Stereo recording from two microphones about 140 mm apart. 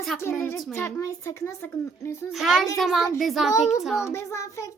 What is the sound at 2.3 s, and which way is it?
A woman's voice, centre (ahead or behind).